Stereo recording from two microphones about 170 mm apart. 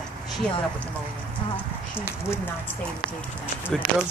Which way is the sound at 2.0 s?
15° left (ahead or behind).